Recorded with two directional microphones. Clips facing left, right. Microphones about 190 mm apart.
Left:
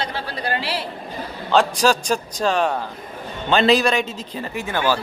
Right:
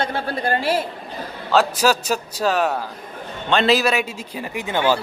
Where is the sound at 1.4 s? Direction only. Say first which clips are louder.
Even; 5° right (ahead or behind).